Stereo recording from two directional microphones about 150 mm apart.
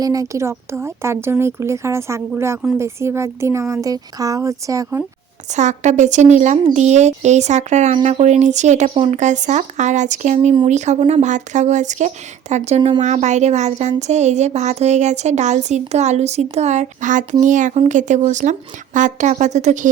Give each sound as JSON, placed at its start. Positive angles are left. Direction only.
{"t": 0.0, "sound": "a woman's voice", "side_deg": -25}
{"t": 5.5, "sound": "a woman's voice", "side_deg": -50}